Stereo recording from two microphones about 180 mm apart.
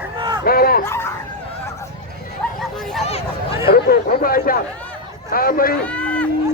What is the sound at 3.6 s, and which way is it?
Chatter, 60° left (ahead or behind).